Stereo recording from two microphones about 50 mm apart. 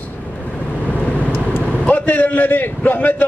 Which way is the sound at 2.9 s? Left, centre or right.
Left.